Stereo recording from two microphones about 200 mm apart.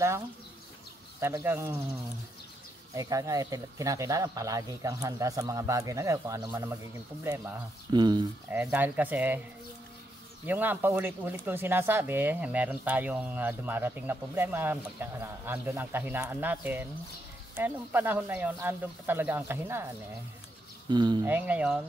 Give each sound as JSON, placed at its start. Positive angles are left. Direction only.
{"t": 1.2, "sound": "speech", "side_deg": -10}
{"t": 3.0, "sound": "speech", "side_deg": -15}
{"t": 8.5, "sound": "speech", "side_deg": -10}
{"t": 10.4, "sound": "speech", "side_deg": -10}
{"t": 20.9, "sound": "speech", "side_deg": -20}
{"t": 21.3, "sound": "speech", "side_deg": -10}